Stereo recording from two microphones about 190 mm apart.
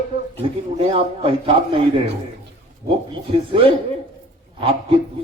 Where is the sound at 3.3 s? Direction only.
30° right (ahead or behind).